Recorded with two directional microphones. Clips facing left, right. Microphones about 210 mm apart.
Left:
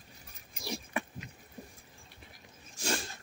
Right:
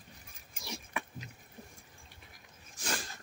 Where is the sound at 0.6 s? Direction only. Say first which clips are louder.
Left 5 dB; 35° left (ahead or behind).